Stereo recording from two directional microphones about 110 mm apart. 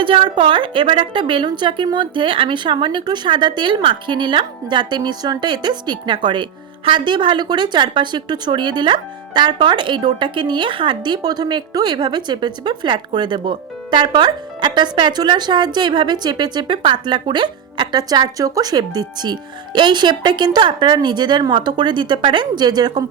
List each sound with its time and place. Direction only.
0.0 s a woman's voice: 50° right (ahead or behind)